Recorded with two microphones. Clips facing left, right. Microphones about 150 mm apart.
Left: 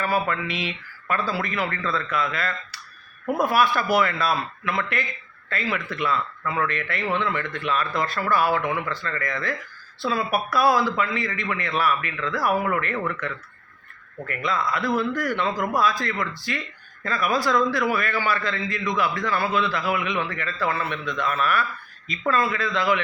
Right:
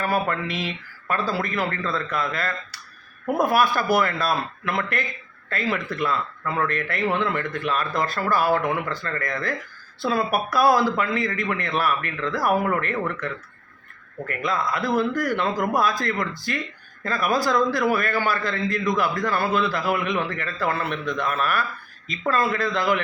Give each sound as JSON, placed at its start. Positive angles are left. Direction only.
{"t": 0.1, "sound": "a man's voice", "side_deg": -45}